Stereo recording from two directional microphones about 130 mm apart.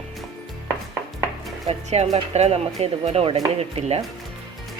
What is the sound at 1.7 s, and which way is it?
Speech, 55° right (ahead or behind).